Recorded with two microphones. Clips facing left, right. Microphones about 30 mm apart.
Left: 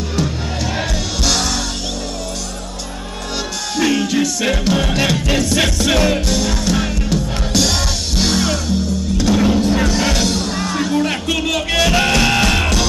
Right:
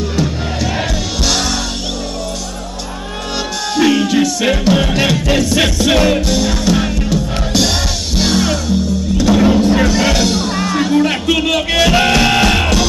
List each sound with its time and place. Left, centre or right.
0.7 s music: centre
3.7 s music: centre